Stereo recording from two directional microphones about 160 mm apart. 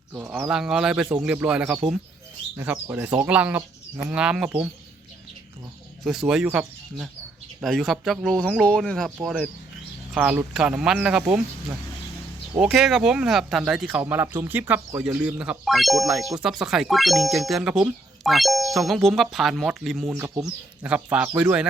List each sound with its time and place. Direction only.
0.1 s speech: 10° right (ahead or behind)
6.1 s speech: 5° right (ahead or behind)
10.2 s speech: 5° right (ahead or behind)
14.0 s speech: 15° right (ahead or behind)
20.1 s speech: 15° right (ahead or behind)